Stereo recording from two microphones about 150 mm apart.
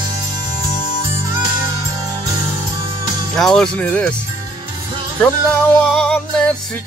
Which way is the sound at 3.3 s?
5° left (ahead or behind).